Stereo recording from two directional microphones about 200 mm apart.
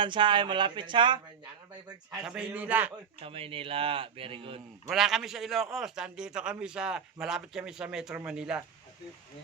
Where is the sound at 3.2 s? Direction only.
30° right (ahead or behind).